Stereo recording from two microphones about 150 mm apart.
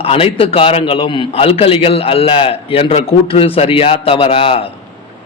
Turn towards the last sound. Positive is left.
turn(degrees=40)  # may be behind; listen again after turning